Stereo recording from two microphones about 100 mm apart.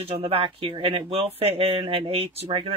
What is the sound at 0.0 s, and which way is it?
Speech, 75° right (ahead or behind).